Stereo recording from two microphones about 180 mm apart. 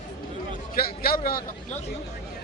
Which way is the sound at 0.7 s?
55° left (ahead or behind).